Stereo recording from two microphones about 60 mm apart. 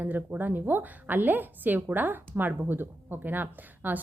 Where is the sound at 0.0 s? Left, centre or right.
Right.